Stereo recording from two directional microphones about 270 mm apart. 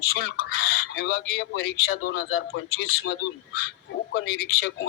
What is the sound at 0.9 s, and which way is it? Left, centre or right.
Speech, left.